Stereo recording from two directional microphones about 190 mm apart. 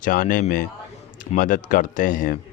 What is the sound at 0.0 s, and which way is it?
A man's voice, 45° left (ahead or behind).